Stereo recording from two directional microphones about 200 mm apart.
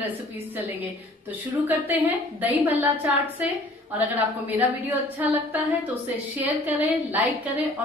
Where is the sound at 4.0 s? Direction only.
10° right (ahead or behind).